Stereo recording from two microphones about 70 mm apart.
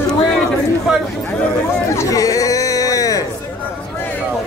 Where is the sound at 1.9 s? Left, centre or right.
Left.